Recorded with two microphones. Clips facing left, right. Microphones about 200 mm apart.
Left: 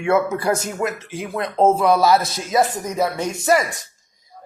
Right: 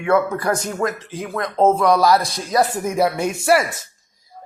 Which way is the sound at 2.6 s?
10° right (ahead or behind).